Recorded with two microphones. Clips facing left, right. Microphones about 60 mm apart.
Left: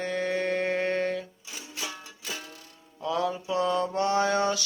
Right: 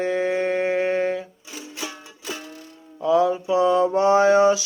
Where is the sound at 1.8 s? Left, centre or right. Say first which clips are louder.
Right 4 dB; right.